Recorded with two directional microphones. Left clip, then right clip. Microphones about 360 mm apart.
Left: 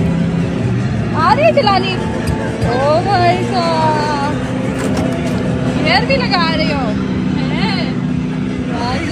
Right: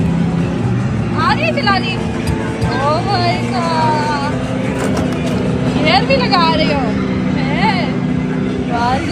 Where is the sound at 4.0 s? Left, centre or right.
Centre.